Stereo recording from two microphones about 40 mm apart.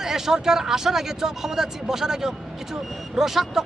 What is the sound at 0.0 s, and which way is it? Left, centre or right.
Speech, centre.